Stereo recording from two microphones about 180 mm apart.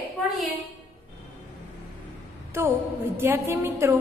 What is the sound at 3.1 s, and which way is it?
Speech, 15° right (ahead or behind).